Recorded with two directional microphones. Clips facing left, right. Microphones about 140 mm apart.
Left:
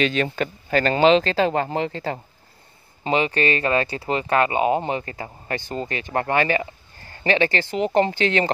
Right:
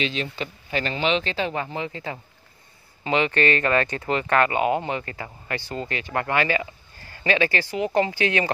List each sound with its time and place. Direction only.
0.0 s speech: 50° left (ahead or behind)
7.5 s speech: 25° left (ahead or behind)